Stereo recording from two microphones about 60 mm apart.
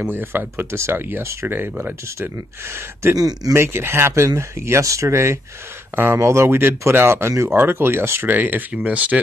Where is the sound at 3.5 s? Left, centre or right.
Right.